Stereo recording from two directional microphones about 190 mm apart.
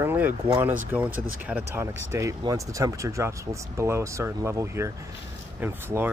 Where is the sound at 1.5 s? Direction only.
5° right (ahead or behind).